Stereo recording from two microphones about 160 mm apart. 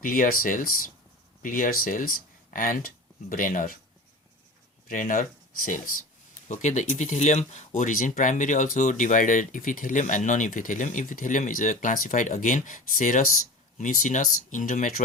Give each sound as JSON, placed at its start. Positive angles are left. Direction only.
{"t": 0.0, "sound": "speech", "side_deg": 60}
{"t": 4.9, "sound": "speech", "side_deg": 55}
{"t": 6.5, "sound": "speech", "side_deg": 50}